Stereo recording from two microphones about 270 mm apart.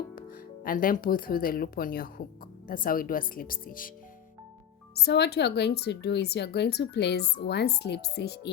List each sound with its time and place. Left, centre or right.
0.2 s a woman's voice: left
4.9 s a woman's voice: left